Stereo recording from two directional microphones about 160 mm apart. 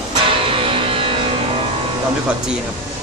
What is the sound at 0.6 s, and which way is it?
Music, 35° right (ahead or behind).